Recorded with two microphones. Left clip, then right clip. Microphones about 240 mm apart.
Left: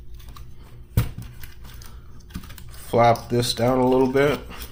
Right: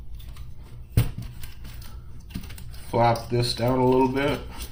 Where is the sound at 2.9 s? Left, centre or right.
Left.